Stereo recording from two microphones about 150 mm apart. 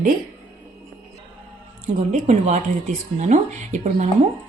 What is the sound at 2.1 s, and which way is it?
Speech, 50° right (ahead or behind).